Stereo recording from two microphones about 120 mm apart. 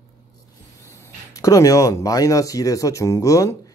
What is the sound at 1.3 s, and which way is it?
Speech, 30° left (ahead or behind).